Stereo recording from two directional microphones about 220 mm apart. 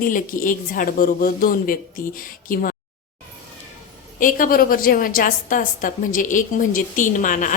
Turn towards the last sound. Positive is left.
turn(degrees=35)  # may be behind; listen again after turning